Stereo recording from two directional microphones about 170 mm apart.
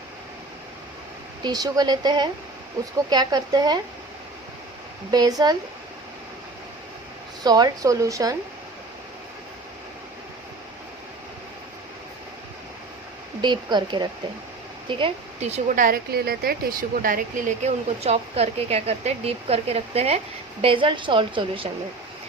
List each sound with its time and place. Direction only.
1.5 s a woman's voice: 20° right (ahead or behind)
5.1 s a woman's voice: 25° right (ahead or behind)
7.4 s a woman's voice: 25° right (ahead or behind)
13.4 s a woman's voice: 25° right (ahead or behind)
15.4 s speech: 40° right (ahead or behind)
15.8 s speech: 65° right (ahead or behind); by 21.7 s 30° right (ahead or behind)